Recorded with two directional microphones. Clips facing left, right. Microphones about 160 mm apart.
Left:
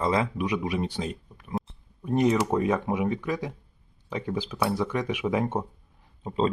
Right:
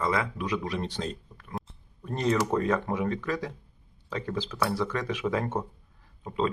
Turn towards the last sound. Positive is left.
turn(degrees=30)  # may be behind; listen again after turning